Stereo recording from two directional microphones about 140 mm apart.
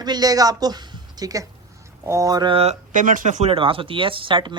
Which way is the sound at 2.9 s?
70° right (ahead or behind).